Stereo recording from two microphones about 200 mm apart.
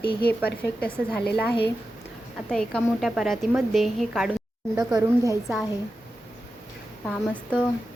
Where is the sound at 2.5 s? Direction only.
5° left (ahead or behind).